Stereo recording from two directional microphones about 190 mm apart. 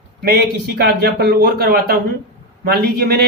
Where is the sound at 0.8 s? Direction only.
55° right (ahead or behind).